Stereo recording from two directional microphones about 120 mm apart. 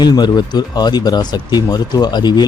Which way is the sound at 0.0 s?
35° left (ahead or behind).